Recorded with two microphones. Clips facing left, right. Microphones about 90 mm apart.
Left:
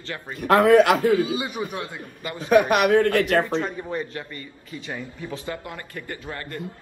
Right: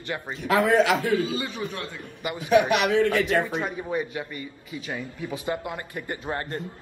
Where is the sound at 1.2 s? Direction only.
20° left (ahead or behind).